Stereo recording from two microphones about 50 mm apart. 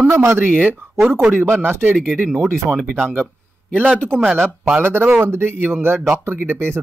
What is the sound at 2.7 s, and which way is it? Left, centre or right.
Speech, right.